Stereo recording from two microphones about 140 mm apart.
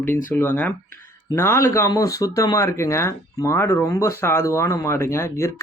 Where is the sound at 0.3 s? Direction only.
15° left (ahead or behind).